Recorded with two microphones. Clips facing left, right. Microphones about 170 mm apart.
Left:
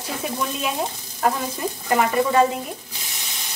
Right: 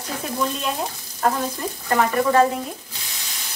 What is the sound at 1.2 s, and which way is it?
Sizzle, 5° left (ahead or behind).